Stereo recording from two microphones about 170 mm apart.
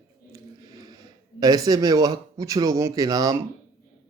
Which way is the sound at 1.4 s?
20° right (ahead or behind).